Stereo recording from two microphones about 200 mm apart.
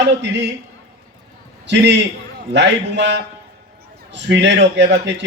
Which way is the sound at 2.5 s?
60° right (ahead or behind).